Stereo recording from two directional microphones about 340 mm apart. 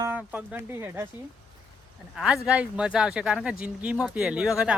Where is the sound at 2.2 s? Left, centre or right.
Centre.